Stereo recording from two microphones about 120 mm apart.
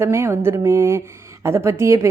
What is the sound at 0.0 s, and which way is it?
Speech, 20° right (ahead or behind).